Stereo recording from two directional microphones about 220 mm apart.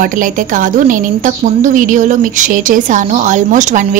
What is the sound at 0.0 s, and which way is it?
A woman's voice, 35° right (ahead or behind).